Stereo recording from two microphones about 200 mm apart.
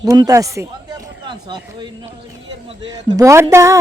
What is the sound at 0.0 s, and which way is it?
Speech, 20° right (ahead or behind).